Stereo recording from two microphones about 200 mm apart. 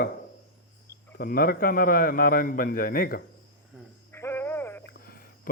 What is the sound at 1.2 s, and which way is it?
A man's voice, 45° left (ahead or behind).